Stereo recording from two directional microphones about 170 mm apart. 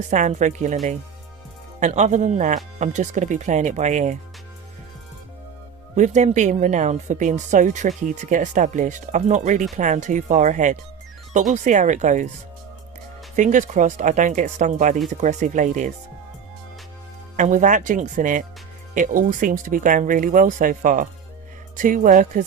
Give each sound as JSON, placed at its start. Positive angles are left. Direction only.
{"t": 0.1, "sound": "speech", "side_deg": -45}
{"t": 1.8, "sound": "speech", "side_deg": -45}
{"t": 6.0, "sound": "speech", "side_deg": -45}
{"t": 13.3, "sound": "speech", "side_deg": -45}
{"t": 17.3, "sound": "speech", "side_deg": -45}